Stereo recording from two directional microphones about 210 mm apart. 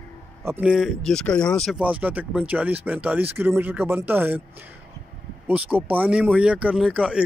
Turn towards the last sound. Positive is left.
turn(degrees=-5)  # may be behind; listen again after turning